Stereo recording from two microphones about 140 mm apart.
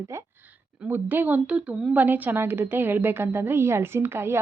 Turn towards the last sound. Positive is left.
turn(degrees=-15)  # may be behind; listen again after turning